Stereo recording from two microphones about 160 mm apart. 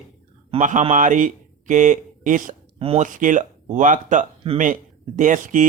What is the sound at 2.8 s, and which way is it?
Speech, 40° right (ahead or behind).